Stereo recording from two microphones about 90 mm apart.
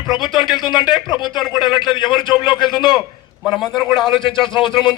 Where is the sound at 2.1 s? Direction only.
60° left (ahead or behind).